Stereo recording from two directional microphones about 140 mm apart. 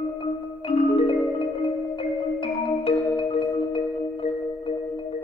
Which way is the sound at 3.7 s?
40° left (ahead or behind).